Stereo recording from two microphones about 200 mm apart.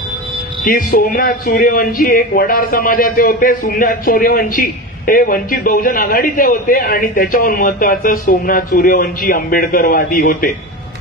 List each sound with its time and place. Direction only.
0.7 s speech: 45° left (ahead or behind)